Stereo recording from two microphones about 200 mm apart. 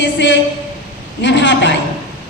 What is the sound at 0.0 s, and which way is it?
A man's voice, 65° left (ahead or behind).